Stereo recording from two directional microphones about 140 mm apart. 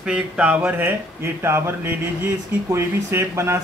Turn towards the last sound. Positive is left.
turn(degrees=-20)  # may be behind; listen again after turning